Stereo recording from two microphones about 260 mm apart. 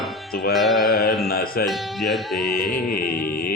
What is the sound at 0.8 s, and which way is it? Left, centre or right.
Music, left.